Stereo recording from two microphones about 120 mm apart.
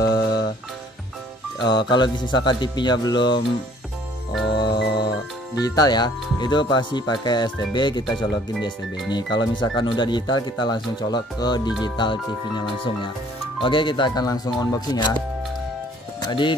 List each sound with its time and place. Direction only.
1.7 s speech: 40° left (ahead or behind)
4.6 s music: 40° left (ahead or behind)
5.6 s speech: 35° left (ahead or behind)
16.2 s speech: 40° left (ahead or behind)